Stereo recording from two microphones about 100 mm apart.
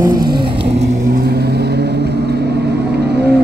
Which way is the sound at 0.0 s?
40° right (ahead or behind).